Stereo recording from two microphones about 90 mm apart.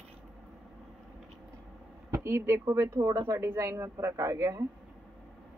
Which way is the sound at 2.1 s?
30° right (ahead or behind).